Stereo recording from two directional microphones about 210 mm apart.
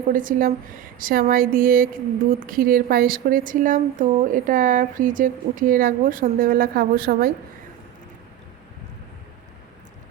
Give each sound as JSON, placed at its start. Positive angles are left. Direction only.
{"t": 0.1, "sound": "a woman's voice", "side_deg": -40}